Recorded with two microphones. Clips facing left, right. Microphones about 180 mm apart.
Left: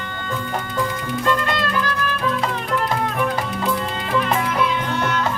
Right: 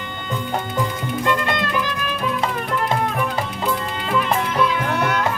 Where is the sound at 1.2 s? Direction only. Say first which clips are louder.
Left 1 dB; 20° right (ahead or behind).